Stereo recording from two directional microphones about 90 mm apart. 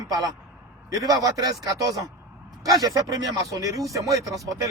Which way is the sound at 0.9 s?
40° right (ahead or behind).